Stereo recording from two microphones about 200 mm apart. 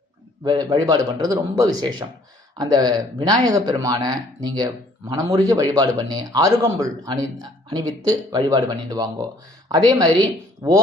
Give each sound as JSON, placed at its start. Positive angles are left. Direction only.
{"t": 0.4, "sound": "speech", "side_deg": -20}